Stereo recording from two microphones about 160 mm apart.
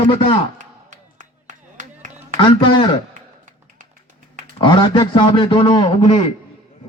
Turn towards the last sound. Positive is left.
turn(degrees=40)  # may be behind; listen again after turning